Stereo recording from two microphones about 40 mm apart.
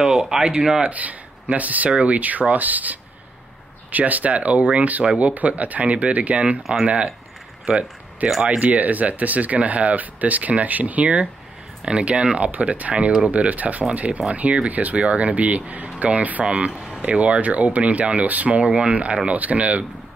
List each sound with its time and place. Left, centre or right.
0.0 s speech: centre
0.8 s speech: right
5.0 s speech: right
5.3 s speech: right